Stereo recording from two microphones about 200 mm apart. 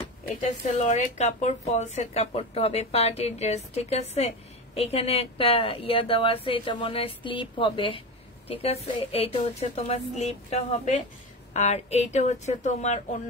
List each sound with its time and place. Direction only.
0.4 s a woman's voice: 35° left (ahead or behind)